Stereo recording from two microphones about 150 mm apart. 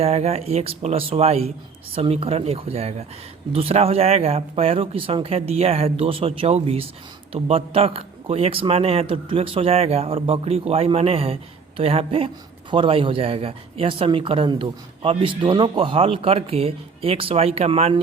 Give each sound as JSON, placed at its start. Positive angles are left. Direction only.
{"t": 0.0, "sound": "speech", "side_deg": -45}